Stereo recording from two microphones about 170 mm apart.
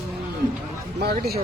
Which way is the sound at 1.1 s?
70° right (ahead or behind).